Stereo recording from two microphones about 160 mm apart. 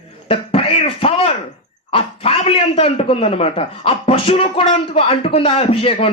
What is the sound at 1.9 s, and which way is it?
A man's voice, 40° left (ahead or behind).